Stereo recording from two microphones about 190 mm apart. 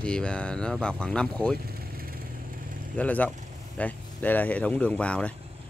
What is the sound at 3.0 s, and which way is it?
Speech, 10° left (ahead or behind).